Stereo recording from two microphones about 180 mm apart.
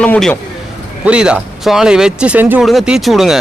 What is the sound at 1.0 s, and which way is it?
Speech, 5° right (ahead or behind).